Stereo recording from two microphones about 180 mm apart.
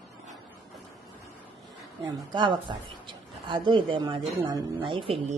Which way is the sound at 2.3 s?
25° right (ahead or behind).